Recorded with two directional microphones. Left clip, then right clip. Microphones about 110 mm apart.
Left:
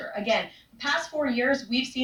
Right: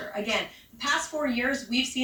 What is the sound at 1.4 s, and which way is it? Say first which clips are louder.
Speech: left 3 dB; 30° left (ahead or behind).